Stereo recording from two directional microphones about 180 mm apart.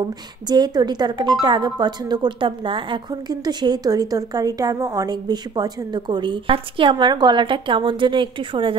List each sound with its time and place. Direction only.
0.5 s speech: 25° right (ahead or behind)